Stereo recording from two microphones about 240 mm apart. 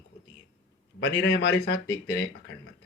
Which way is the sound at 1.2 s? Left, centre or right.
Left.